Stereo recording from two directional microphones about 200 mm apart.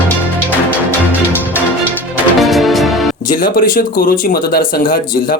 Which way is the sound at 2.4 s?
Centre (ahead or behind).